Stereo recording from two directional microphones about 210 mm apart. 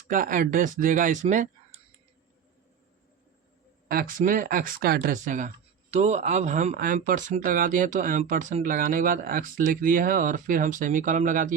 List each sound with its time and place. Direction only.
0.1 s speech: 40° right (ahead or behind)
3.8 s speech: 45° right (ahead or behind)